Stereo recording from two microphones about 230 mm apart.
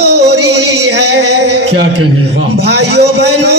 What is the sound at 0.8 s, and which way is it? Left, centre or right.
Singing, right.